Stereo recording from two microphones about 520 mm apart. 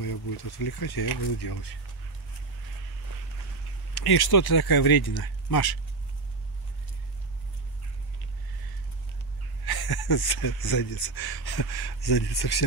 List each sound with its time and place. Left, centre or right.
0.0 s speech: left
3.9 s speech: left
9.7 s speech: left